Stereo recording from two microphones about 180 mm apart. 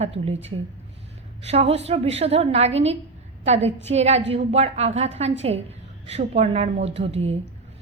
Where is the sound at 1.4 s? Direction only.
35° right (ahead or behind).